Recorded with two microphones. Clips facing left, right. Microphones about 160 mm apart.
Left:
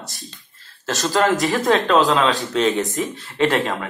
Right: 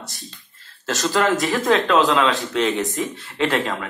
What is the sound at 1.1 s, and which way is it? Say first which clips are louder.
A man's voice: left 2 dB; 40° left (ahead or behind).